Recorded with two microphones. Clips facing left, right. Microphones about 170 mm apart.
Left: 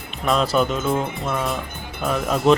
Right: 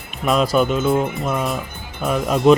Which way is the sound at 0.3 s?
10° right (ahead or behind).